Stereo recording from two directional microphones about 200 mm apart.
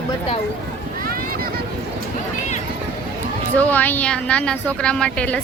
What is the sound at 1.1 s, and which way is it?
Boat, 45° right (ahead or behind).